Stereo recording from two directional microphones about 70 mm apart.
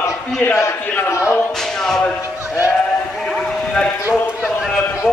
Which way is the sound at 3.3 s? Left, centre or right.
Centre.